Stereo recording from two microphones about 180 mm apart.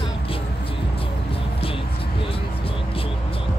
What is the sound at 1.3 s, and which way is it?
Music, 30° left (ahead or behind).